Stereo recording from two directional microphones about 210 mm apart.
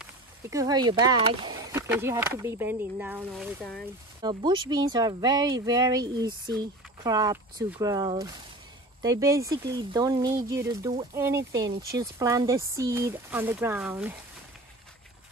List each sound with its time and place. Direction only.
0.5 s speech: 15° right (ahead or behind); by 3.9 s 5° left (ahead or behind)
4.2 s speech: 20° right (ahead or behind)